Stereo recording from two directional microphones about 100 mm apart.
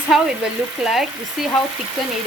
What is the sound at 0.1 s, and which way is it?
Speech, centre (ahead or behind).